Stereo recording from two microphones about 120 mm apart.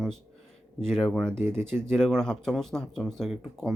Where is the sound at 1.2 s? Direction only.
20° right (ahead or behind).